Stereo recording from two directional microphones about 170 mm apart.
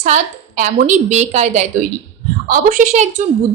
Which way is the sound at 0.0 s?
45° right (ahead or behind).